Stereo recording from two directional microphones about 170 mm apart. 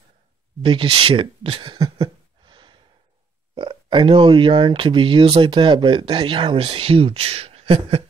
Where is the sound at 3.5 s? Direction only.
25° right (ahead or behind).